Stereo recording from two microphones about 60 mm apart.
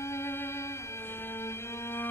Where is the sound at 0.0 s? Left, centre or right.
Left.